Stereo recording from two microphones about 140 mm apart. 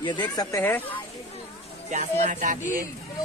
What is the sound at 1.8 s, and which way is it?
Speech, 60° right (ahead or behind).